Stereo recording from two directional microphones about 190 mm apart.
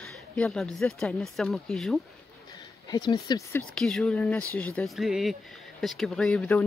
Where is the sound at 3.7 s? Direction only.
5° left (ahead or behind).